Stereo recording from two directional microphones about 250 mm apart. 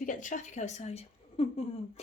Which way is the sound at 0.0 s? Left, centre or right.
Left.